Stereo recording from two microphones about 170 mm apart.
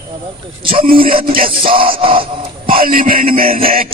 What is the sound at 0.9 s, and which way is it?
Speech, 30° right (ahead or behind).